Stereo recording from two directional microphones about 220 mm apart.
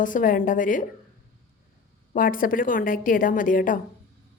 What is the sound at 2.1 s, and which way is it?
A woman's voice, 40° left (ahead or behind).